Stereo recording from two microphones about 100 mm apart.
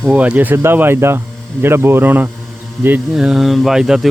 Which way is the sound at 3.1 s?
5° right (ahead or behind).